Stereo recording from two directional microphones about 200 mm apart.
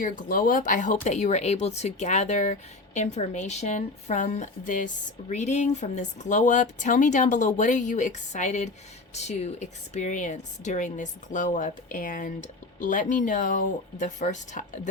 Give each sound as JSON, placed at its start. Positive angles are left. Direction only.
{"t": 0.0, "sound": "speech", "side_deg": 45}